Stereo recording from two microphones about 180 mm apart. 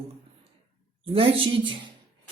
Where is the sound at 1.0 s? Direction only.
30° right (ahead or behind).